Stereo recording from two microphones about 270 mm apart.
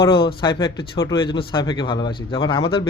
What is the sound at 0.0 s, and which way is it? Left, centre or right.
Speech, centre.